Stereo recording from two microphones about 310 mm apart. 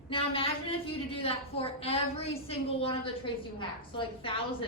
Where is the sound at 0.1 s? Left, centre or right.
Centre.